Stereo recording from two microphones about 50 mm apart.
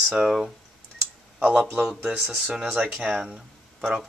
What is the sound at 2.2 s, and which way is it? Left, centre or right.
Speech, centre.